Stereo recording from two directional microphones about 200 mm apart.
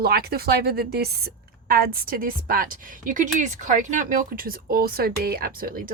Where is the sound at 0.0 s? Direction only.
50° right (ahead or behind).